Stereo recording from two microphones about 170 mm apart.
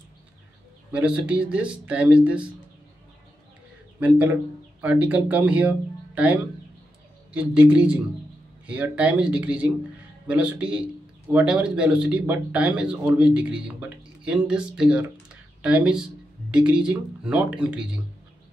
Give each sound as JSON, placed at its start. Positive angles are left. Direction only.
{"t": 0.9, "sound": "speech", "side_deg": -5}
{"t": 4.0, "sound": "a man's voice", "side_deg": -10}